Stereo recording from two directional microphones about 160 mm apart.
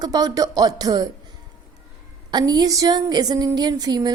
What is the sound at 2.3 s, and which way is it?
A woman's voice, 25° right (ahead or behind).